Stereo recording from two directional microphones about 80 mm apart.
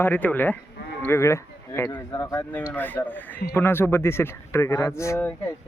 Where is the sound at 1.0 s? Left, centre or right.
Left.